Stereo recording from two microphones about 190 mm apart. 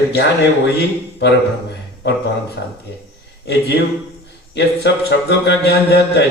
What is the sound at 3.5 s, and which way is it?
A man's voice, 60° left (ahead or behind).